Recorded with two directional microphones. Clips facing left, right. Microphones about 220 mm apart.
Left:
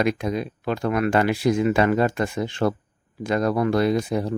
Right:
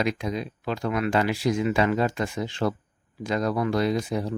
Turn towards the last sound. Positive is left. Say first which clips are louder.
# left 4 dB
turn(degrees=55)  # may be behind; listen again after turning